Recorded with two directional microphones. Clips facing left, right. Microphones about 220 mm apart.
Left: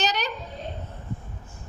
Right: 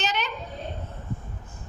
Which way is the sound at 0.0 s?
40° left (ahead or behind).